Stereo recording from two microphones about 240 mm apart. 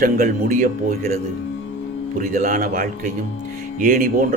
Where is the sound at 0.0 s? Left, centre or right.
Right.